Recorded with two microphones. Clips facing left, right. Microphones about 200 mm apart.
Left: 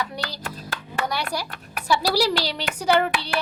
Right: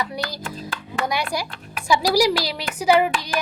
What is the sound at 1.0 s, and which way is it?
A child's voice, 10° right (ahead or behind).